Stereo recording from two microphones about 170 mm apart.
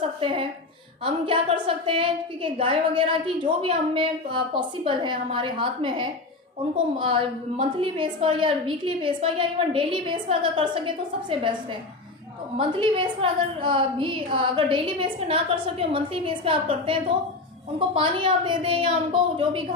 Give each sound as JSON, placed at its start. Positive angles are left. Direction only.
{"t": 0.0, "sound": "a sound", "side_deg": -30}
{"t": 1.0, "sound": "a woman's voice", "side_deg": -30}
{"t": 12.5, "sound": "a woman's voice", "side_deg": -30}